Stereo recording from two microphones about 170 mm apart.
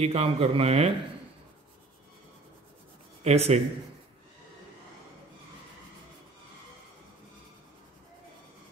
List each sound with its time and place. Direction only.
0.0 s speech: 35° right (ahead or behind)
3.3 s speech: 40° right (ahead or behind)